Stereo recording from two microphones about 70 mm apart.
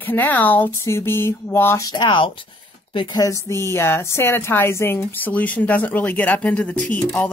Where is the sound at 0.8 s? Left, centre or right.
Left.